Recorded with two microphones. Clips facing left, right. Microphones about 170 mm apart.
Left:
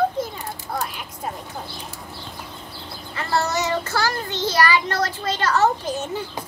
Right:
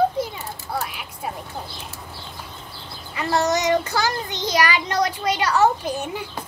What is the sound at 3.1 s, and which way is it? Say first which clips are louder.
A child's voice: right 2 dB; 15° right (ahead or behind).